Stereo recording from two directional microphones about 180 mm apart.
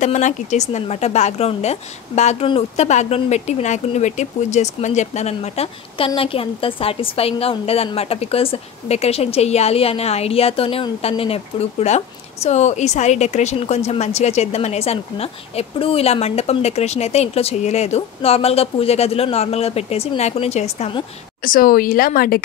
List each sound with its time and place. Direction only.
0.0 s speech: 40° left (ahead or behind)
21.5 s speech: 50° left (ahead or behind)